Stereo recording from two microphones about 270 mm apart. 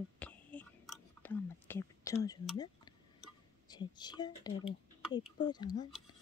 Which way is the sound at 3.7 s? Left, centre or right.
Centre.